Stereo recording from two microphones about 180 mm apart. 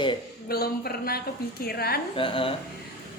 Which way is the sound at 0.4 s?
60° left (ahead or behind).